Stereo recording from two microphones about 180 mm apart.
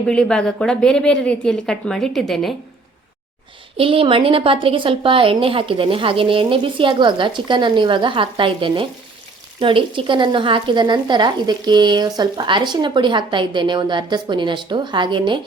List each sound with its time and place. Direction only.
0.1 s a woman's voice: 5° left (ahead or behind)
3.8 s speech: 30° right (ahead or behind)